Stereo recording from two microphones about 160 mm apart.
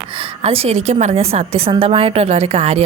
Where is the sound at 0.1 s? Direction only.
35° right (ahead or behind).